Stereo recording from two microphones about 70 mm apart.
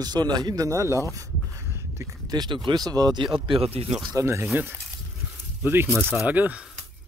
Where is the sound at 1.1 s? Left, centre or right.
Right.